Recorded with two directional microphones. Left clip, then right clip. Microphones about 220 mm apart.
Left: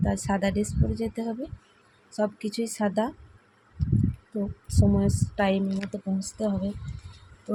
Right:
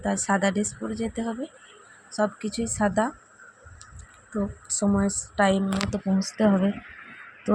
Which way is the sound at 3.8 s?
40° right (ahead or behind).